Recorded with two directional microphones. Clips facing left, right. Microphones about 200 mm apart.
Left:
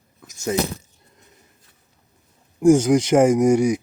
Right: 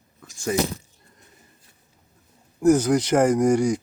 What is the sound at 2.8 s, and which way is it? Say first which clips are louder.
Speech: left 3 dB; 15° left (ahead or behind).